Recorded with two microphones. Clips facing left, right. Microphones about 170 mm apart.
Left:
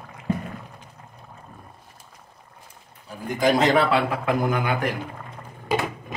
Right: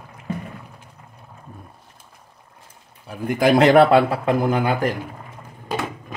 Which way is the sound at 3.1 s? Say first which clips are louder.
Right 4 dB; 60° right (ahead or behind).